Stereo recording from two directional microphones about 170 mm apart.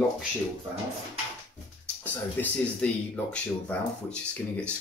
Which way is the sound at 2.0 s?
10° left (ahead or behind).